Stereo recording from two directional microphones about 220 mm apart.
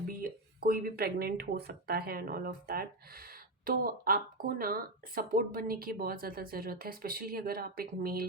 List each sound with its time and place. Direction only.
0.2 s speech: 40° right (ahead or behind)